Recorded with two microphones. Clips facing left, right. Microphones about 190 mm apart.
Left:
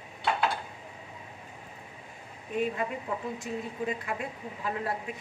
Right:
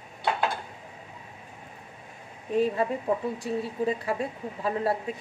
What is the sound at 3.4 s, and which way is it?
A woman's voice, 35° right (ahead or behind).